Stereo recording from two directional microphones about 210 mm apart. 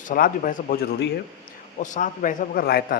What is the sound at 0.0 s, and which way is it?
A man's voice, 40° left (ahead or behind).